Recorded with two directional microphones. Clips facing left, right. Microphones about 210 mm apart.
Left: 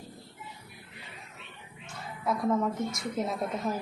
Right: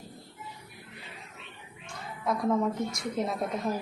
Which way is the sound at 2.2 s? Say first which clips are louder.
Right 1 dB; centre (ahead or behind).